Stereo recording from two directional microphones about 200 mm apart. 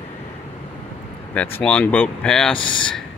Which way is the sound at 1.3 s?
10° left (ahead or behind).